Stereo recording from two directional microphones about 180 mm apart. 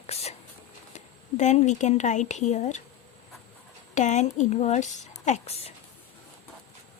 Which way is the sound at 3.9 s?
40° left (ahead or behind).